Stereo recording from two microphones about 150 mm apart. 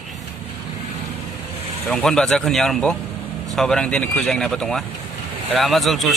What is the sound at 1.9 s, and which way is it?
A man's voice, 5° left (ahead or behind).